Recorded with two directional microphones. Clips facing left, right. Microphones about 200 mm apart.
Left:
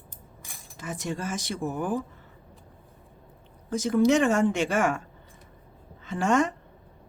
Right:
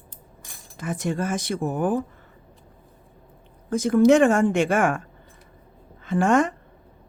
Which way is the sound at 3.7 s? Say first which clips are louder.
Right 5 dB; 55° right (ahead or behind).